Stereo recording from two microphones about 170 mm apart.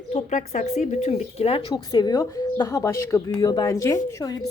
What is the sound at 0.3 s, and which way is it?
Speech, 45° left (ahead or behind).